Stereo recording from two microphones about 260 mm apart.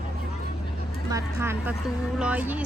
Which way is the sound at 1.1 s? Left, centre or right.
Centre.